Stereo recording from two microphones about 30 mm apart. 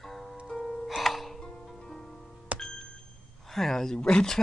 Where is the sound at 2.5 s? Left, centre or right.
Right.